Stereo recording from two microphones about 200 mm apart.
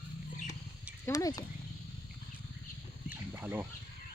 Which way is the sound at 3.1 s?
10° right (ahead or behind).